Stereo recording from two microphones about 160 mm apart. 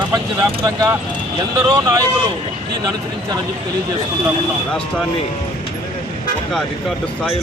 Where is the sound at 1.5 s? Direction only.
20° right (ahead or behind).